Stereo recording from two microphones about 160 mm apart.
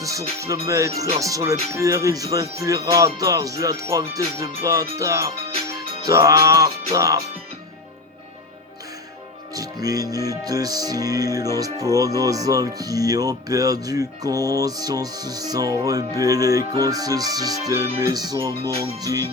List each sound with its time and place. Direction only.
0.0 s speech: 20° right (ahead or behind)
9.8 s speech: 20° right (ahead or behind)